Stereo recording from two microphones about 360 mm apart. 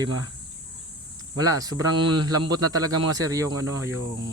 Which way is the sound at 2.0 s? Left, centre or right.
Right.